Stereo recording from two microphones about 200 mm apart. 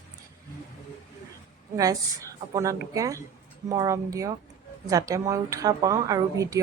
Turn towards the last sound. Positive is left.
turn(degrees=-15)  # may be behind; listen again after turning